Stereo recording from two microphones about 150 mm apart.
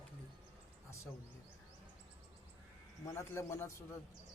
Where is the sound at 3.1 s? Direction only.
15° left (ahead or behind).